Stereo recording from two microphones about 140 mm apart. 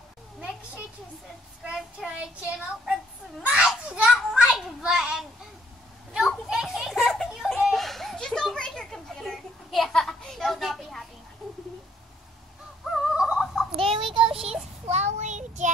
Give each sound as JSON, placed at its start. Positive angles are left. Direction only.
{"t": 1.6, "sound": "child singing", "side_deg": -5}
{"t": 3.4, "sound": "a child's voice", "side_deg": -10}
{"t": 6.1, "sound": "children playing", "side_deg": -5}
{"t": 11.4, "sound": "a sound", "side_deg": 0}
{"t": 12.9, "sound": "fowl", "side_deg": -5}
{"t": 13.7, "sound": "child singing", "side_deg": -40}
{"t": 14.9, "sound": "child singing", "side_deg": -55}